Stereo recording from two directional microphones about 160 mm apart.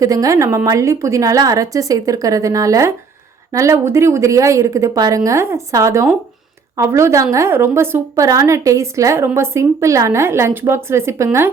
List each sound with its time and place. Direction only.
0.0 s a woman's voice: 20° right (ahead or behind)